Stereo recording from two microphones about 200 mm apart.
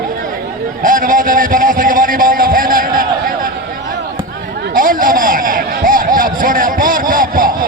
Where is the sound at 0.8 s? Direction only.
40° right (ahead or behind).